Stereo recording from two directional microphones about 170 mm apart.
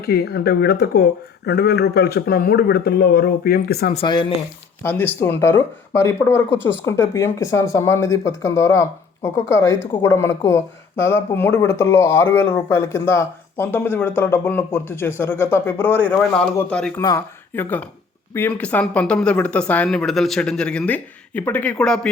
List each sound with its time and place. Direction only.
0.0 s speech: 70° left (ahead or behind)
3.9 s speech: 30° left (ahead or behind)
4.8 s speech: 10° left (ahead or behind)
17.0 s speech: 20° left (ahead or behind)
17.5 s speech: 10° left (ahead or behind)